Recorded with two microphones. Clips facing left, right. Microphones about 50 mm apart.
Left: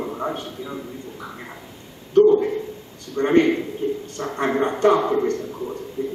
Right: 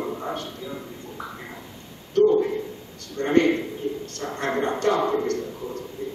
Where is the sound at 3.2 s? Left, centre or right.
Centre.